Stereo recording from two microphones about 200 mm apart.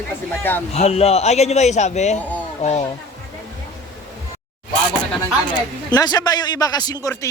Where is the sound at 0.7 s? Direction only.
30° left (ahead or behind).